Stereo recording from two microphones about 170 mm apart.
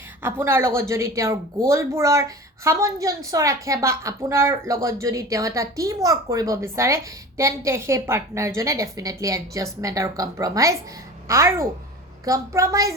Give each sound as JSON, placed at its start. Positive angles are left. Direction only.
{"t": 0.2, "sound": "a woman's voice", "side_deg": -15}